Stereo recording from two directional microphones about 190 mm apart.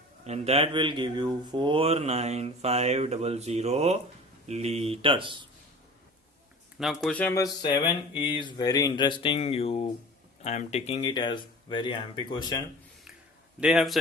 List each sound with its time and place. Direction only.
0.3 s speech: 35° right (ahead or behind)
6.7 s speech: centre (ahead or behind); by 12.6 s 20° left (ahead or behind)
13.6 s a man's voice: 5° right (ahead or behind)